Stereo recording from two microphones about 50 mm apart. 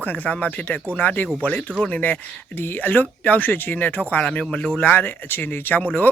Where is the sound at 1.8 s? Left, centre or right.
Left.